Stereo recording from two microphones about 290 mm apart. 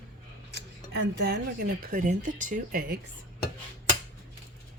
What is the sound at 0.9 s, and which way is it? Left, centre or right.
A woman's voice, right.